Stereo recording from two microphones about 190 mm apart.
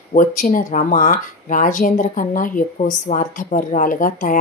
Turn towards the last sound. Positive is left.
turn(degrees=45)  # may be behind; listen again after turning